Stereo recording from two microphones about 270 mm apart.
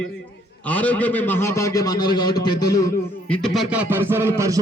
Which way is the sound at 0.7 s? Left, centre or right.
Centre.